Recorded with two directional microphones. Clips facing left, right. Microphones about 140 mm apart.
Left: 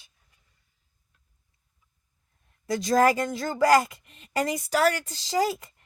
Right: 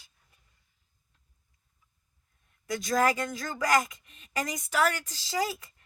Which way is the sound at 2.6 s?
30° left (ahead or behind).